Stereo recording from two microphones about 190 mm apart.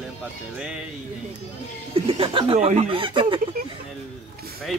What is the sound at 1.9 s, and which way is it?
Speech, 30° right (ahead or behind).